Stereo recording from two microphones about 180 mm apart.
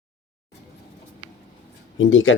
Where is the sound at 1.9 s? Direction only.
90° left.